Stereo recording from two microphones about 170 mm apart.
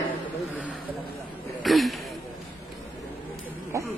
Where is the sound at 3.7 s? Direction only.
20° right (ahead or behind).